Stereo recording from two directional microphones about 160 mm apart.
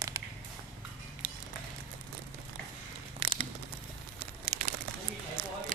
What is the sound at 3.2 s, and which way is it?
Crumpling, 35° right (ahead or behind).